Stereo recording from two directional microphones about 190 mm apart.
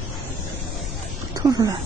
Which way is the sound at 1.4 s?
20° right (ahead or behind).